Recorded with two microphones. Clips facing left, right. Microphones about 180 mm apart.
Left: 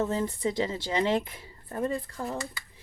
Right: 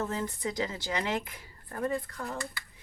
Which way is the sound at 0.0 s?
25° left (ahead or behind).